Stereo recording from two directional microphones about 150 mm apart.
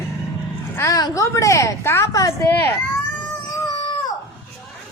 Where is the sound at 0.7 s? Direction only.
20° left (ahead or behind).